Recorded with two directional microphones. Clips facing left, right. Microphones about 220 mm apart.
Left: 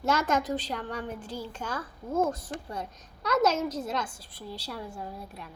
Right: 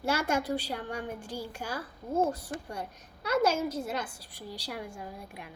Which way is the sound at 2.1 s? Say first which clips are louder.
Left 1 dB; 35° right (ahead or behind).